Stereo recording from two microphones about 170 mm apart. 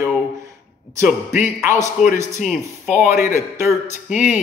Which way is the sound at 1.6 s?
15° right (ahead or behind).